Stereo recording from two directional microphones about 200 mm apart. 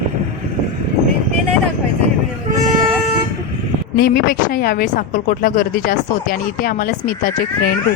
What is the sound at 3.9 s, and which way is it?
A woman's voice, 50° left (ahead or behind).